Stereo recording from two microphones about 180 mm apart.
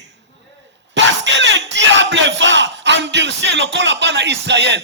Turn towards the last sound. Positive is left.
turn(degrees=-75)  # may be behind; listen again after turning